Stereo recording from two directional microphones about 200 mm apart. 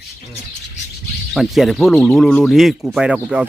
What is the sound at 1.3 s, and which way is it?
Speech, centre (ahead or behind).